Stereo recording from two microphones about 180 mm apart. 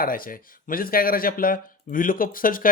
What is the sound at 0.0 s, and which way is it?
Speech, 50° left (ahead or behind).